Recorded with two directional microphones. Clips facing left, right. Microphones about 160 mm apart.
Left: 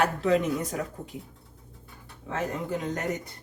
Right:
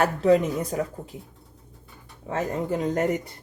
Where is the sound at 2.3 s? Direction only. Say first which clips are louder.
Right 4 dB; 35° right (ahead or behind).